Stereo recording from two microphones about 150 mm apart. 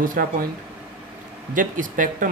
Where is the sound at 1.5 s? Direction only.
60° right (ahead or behind).